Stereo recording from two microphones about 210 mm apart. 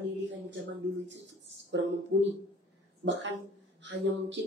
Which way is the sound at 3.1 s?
60° right (ahead or behind).